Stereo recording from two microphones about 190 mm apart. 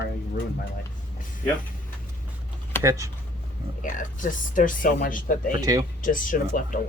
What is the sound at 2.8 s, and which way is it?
Speech, 15° right (ahead or behind).